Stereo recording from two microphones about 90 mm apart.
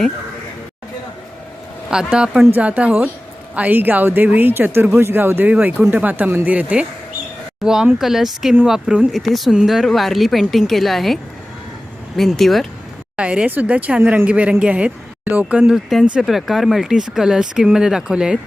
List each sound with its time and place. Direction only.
1.9 s speech: 10° right (ahead or behind)
13.1 s a man's voice: 15° right (ahead or behind)